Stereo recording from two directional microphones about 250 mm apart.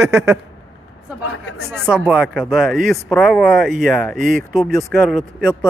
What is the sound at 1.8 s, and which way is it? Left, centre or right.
Speech, centre.